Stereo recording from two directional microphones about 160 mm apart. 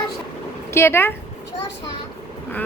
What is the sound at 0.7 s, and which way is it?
Speech, 15° left (ahead or behind).